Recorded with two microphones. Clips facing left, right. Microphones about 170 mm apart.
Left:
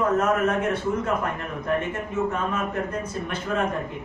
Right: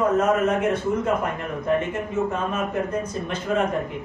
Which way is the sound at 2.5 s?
20° right (ahead or behind).